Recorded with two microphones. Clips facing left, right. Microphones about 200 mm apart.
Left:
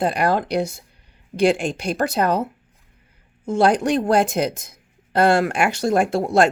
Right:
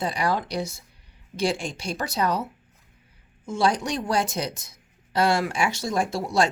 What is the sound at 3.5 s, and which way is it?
Speech, 60° left (ahead or behind).